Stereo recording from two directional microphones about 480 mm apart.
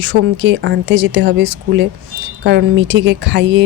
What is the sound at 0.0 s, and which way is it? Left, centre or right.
Speech, right.